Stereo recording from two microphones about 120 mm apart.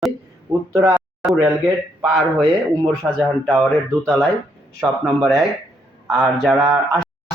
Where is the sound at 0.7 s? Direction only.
20° right (ahead or behind).